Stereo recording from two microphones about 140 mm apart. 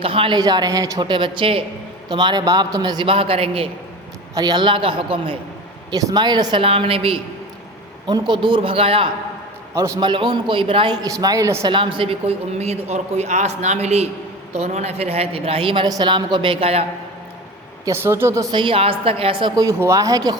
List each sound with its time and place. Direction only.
0.0 s a woman's voice: 40° right (ahead or behind)
4.4 s a woman's voice: 30° right (ahead or behind)
5.9 s a woman's voice: 30° right (ahead or behind)
9.7 s a woman's voice: 20° right (ahead or behind)
10.0 s a woman's voice: 35° right (ahead or behind)
11.1 s a woman's voice: 25° right (ahead or behind)
11.7 s a man's voice: 35° right (ahead or behind)
17.8 s a woman's voice: 20° right (ahead or behind)